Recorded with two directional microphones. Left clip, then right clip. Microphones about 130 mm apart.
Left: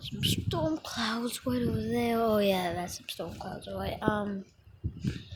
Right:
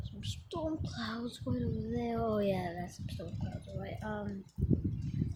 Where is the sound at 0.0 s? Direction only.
20° left (ahead or behind).